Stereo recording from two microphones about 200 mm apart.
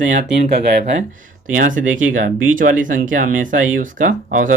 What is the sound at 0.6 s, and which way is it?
Speech, 50° right (ahead or behind).